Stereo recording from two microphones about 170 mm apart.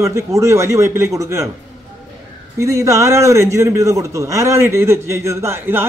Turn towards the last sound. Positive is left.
turn(degrees=-15)  # may be behind; listen again after turning